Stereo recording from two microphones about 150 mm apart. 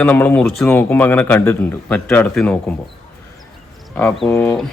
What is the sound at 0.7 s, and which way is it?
A man's voice, 15° left (ahead or behind).